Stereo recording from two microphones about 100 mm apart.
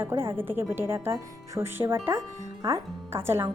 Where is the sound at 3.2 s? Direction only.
25° right (ahead or behind).